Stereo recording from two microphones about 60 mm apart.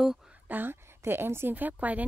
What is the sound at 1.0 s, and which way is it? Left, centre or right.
A woman's voice, right.